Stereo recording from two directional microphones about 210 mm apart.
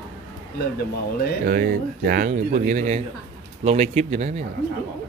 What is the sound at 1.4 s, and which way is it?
A man's voice, 45° right (ahead or behind).